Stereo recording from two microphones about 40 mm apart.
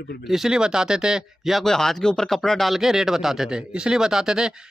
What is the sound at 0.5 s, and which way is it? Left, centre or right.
Speech, centre.